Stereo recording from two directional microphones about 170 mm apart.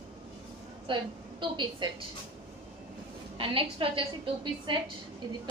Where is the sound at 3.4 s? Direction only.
30° right (ahead or behind).